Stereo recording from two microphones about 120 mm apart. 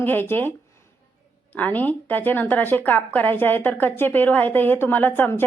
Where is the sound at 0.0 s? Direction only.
15° left (ahead or behind).